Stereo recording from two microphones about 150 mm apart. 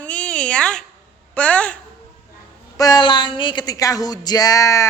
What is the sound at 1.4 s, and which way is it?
Speech, 10° left (ahead or behind).